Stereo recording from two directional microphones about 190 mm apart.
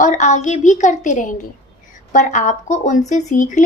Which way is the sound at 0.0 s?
40° left (ahead or behind).